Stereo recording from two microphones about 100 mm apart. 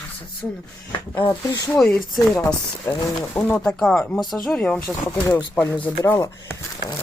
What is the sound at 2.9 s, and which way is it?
Speech, 25° left (ahead or behind).